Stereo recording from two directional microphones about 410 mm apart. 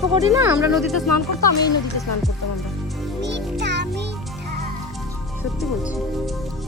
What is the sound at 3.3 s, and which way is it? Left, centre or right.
Music, right.